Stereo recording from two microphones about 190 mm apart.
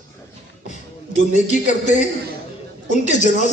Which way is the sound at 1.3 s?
40° left (ahead or behind).